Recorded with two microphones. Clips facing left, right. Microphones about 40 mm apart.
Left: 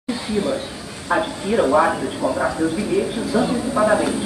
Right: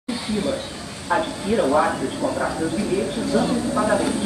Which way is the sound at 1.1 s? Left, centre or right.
Centre.